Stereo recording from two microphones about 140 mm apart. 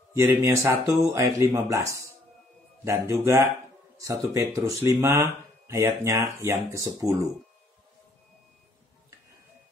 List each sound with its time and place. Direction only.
0.4 s speech: 20° right (ahead or behind)